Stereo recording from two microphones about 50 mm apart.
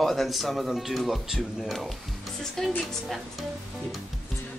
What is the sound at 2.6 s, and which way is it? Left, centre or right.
Speech, centre.